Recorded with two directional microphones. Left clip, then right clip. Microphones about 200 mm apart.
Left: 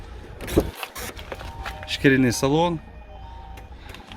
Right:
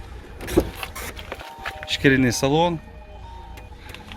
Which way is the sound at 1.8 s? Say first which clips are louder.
Right 1 dB; centre (ahead or behind).